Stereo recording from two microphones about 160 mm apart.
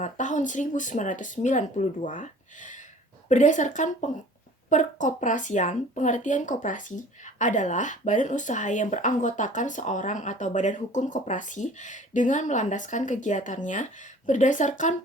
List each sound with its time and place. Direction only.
0.0 s speech: 50° left (ahead or behind)